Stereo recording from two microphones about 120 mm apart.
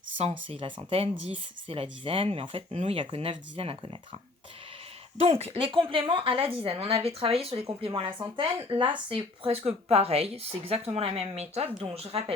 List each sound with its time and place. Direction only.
0.2 s speech: 60° right (ahead or behind)
5.2 s speech: 55° right (ahead or behind)